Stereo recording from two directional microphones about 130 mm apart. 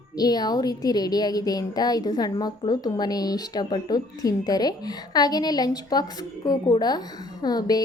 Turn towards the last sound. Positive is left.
turn(degrees=30)  # may be behind; listen again after turning